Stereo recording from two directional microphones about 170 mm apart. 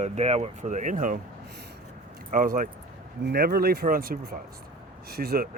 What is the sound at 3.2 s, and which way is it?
Speech, 65° right (ahead or behind).